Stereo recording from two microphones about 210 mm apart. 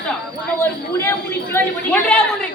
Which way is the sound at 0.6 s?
10° left (ahead or behind).